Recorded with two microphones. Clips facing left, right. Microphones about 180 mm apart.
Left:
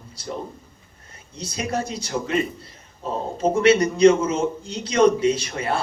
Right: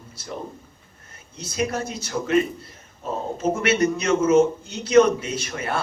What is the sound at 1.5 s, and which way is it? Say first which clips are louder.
Speech: right 1 dB; 30° left (ahead or behind).